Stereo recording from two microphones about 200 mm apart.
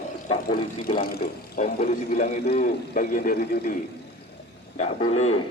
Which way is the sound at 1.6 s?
35° left (ahead or behind).